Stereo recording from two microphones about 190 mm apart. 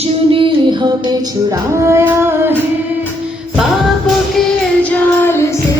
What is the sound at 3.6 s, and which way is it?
Music, centre (ahead or behind).